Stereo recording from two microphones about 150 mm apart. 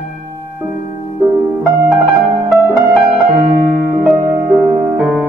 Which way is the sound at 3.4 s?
85° right.